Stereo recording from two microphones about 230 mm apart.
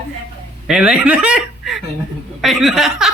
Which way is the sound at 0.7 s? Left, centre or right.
Centre.